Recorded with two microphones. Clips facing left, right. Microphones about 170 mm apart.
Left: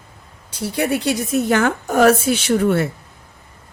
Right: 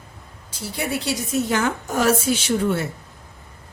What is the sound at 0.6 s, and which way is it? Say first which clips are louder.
A woman's voice: left 6 dB; 60° left (ahead or behind).